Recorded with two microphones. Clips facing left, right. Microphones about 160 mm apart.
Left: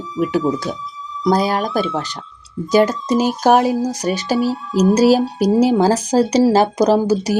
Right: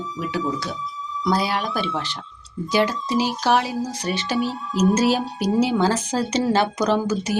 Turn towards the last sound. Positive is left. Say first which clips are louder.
# left 7 dB
turn(degrees=35)  # may be behind; listen again after turning